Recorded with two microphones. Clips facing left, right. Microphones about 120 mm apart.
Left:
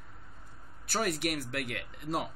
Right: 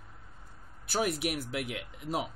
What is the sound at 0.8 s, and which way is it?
Speech, centre (ahead or behind).